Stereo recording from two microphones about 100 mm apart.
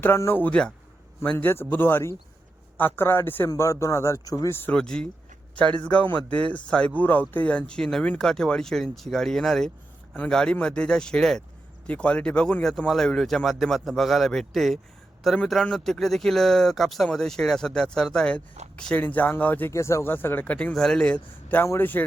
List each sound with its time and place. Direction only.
0.0 s speech: 25° left (ahead or behind)
4.6 s speech: 10° left (ahead or behind)
19.7 s speech: 30° left (ahead or behind); by 21.6 s 10° left (ahead or behind)
21.6 s speech: 20° left (ahead or behind)